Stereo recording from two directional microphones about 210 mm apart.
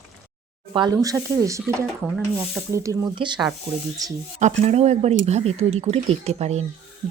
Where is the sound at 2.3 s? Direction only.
15° right (ahead or behind).